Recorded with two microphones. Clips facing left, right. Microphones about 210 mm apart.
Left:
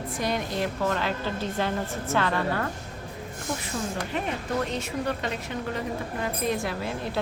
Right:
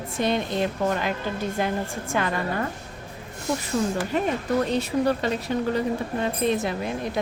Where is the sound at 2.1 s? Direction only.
15° right (ahead or behind).